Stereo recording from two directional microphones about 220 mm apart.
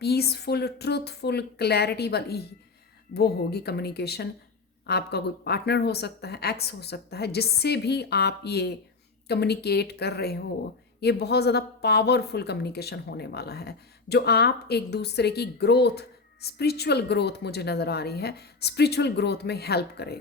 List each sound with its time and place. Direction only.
0.0 s speech: 45° left (ahead or behind)